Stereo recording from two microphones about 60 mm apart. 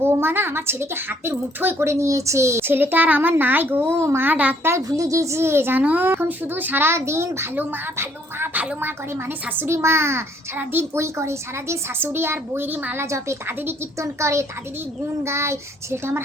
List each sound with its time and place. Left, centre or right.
0.0 s a woman's voice: right
2.6 s speech: right
4.3 s speech: right
4.9 s a woman's voice: right
5.8 s speech: right
9.6 s a woman's voice: right
10.6 s speech: right
10.9 s a woman's voice: right
13.0 s a child's voice: right